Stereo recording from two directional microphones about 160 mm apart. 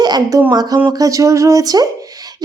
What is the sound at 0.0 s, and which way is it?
Speech, 25° right (ahead or behind).